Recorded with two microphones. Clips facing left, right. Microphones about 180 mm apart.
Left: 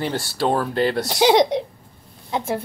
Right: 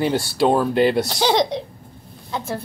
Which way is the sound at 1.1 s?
15° left (ahead or behind).